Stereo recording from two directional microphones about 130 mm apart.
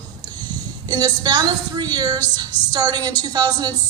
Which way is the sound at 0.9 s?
30° right (ahead or behind).